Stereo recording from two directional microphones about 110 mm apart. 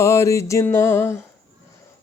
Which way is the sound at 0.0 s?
25° left (ahead or behind).